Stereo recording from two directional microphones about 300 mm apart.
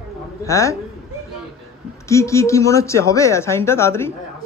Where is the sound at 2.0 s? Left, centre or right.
Centre.